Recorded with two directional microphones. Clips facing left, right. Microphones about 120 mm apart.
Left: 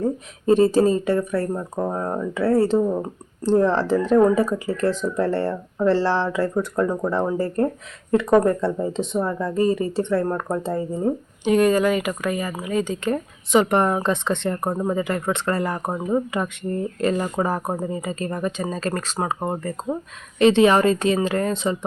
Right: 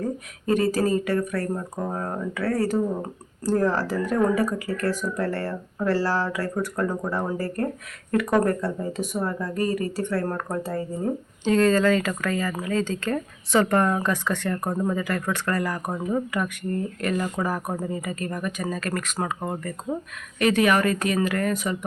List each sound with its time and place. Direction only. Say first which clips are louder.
0.0 s speech: left 6 dB; 25° left (ahead or behind)